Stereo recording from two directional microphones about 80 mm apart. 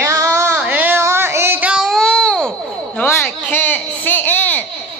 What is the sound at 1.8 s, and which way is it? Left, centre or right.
Baby cry, centre.